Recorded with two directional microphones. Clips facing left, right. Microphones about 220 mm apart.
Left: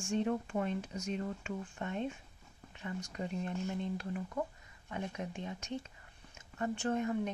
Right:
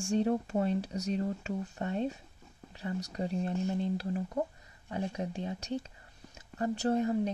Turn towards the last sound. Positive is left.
turn(degrees=-35)  # may be behind; listen again after turning